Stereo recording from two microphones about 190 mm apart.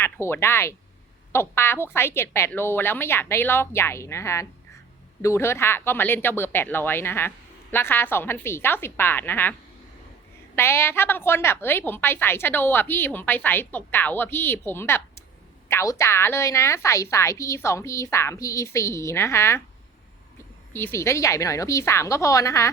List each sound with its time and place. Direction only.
0.0 s a woman's voice: 15° left (ahead or behind)
20.7 s a woman's voice: 15° left (ahead or behind)